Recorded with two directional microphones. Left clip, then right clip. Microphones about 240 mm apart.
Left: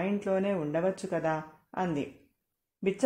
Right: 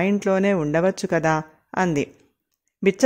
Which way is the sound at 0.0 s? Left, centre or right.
Right.